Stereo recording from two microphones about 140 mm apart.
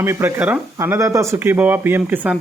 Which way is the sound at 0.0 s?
15° right (ahead or behind).